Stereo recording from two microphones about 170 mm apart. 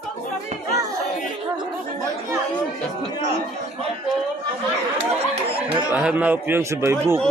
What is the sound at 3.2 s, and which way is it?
Speech, 40° right (ahead or behind).